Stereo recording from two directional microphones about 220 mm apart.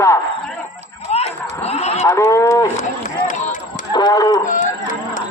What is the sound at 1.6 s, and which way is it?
Cattle, 30° left (ahead or behind).